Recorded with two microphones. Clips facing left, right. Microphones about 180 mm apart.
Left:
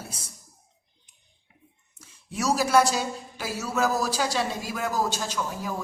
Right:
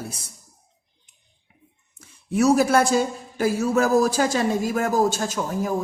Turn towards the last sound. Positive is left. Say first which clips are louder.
# right 6 dB
turn(degrees=-50)  # may be behind; listen again after turning